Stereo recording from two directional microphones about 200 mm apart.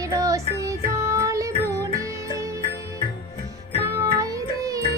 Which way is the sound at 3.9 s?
15° right (ahead or behind).